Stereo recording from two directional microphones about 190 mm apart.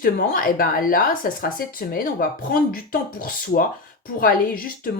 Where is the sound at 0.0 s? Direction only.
50° left (ahead or behind).